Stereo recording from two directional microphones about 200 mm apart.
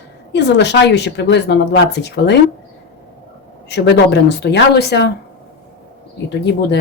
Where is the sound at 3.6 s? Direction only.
55° left (ahead or behind).